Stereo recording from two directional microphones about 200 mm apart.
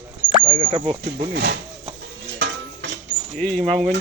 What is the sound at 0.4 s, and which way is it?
Speech, 25° right (ahead or behind).